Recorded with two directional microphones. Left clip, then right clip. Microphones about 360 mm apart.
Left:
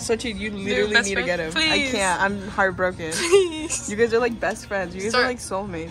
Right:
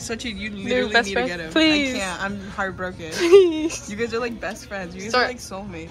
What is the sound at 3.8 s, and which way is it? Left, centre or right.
A woman's voice, left.